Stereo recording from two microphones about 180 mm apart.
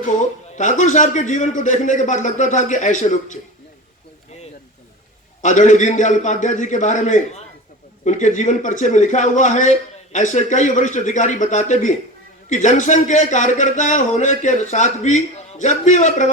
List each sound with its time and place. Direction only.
0.5 s a man's voice: 45° left (ahead or behind)
5.4 s a man's voice: 45° left (ahead or behind)